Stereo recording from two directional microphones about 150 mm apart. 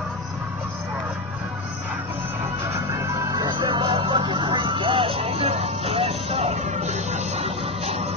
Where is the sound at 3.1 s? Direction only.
25° right (ahead or behind).